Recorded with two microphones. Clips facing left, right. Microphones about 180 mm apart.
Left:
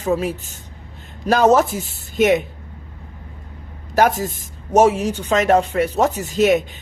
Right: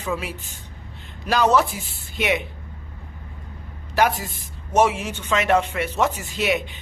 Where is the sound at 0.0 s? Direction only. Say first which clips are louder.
Left 8 dB; 40° left (ahead or behind).